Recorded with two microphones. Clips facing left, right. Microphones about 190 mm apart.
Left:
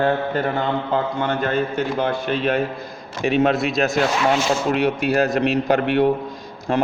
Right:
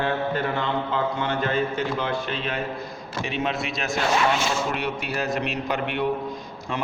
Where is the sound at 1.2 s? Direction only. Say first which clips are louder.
Left 3 dB; 50° left (ahead or behind).